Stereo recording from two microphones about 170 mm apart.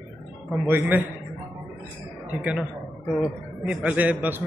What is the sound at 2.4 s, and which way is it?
Speech, 5° right (ahead or behind).